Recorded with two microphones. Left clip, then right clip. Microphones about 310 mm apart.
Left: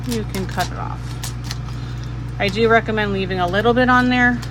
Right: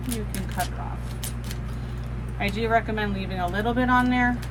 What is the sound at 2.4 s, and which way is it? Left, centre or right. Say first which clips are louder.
Speech: left 8 dB; left.